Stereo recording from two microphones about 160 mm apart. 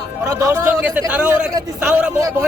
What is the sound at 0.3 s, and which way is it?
A man's voice, 20° right (ahead or behind).